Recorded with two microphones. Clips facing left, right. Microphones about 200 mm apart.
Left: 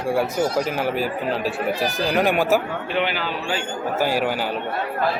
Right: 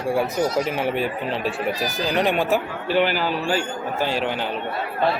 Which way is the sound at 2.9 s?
40° right (ahead or behind).